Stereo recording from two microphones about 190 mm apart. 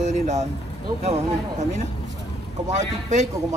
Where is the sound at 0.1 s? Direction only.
35° right (ahead or behind).